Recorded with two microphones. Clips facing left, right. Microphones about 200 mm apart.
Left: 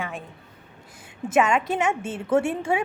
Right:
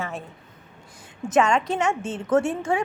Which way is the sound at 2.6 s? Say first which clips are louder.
Even; 25° left (ahead or behind).